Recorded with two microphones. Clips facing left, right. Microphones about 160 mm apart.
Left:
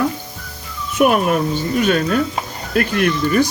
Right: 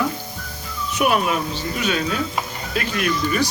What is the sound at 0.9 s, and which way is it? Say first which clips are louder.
Speech: left 5 dB; 50° left (ahead or behind).